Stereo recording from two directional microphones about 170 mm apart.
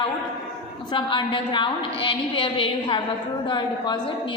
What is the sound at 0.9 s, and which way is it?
A woman's voice, 30° left (ahead or behind).